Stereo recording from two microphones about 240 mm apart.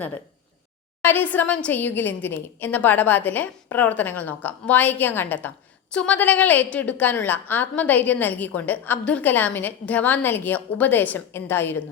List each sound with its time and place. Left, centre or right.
1.0 s a woman's voice: centre